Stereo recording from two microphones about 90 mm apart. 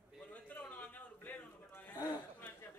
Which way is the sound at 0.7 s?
20° left (ahead or behind).